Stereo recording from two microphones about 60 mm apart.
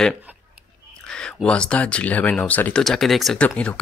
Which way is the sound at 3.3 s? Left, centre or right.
Left.